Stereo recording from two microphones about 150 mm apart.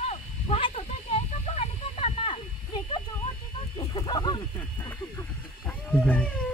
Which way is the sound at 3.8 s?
30° left (ahead or behind).